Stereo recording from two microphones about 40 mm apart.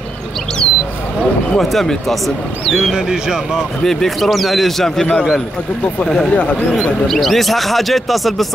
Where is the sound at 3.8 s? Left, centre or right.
Centre.